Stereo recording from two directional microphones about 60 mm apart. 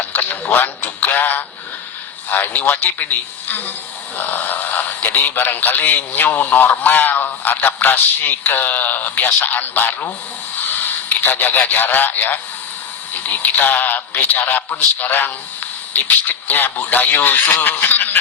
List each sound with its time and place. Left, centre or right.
0.0 s a sound: left
2.3 s a man's voice: left
4.2 s a man's voice: left
11.2 s a man's voice: left